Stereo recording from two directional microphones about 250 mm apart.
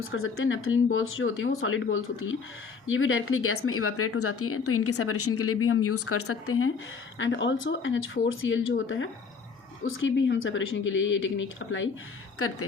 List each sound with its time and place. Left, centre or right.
0.1 s speech: left